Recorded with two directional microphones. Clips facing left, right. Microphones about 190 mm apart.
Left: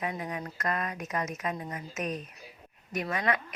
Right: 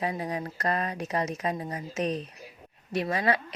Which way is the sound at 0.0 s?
30° right (ahead or behind).